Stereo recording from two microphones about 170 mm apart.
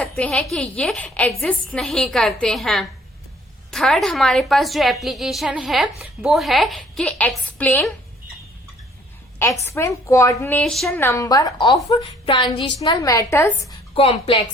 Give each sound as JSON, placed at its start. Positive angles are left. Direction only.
{"t": 0.2, "sound": "a woman's voice", "side_deg": 5}
{"t": 9.6, "sound": "a woman's voice", "side_deg": 15}
{"t": 10.6, "sound": "a woman's voice", "side_deg": 0}
{"t": 11.0, "sound": "a woman's voice", "side_deg": 20}
{"t": 13.9, "sound": "a woman's voice", "side_deg": 35}